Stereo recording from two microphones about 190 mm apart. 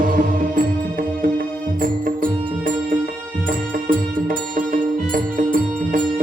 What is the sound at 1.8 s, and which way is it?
Music, 45° right (ahead or behind).